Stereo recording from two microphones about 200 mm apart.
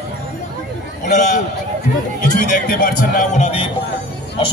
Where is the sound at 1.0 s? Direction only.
35° left (ahead or behind).